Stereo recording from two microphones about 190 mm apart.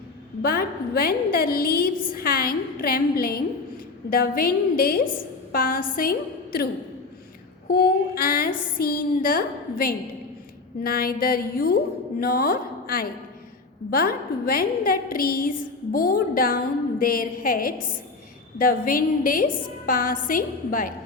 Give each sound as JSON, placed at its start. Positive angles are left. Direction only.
{"t": 0.4, "sound": "a woman's voice", "side_deg": 50}
{"t": 7.7, "sound": "a woman's voice", "side_deg": 50}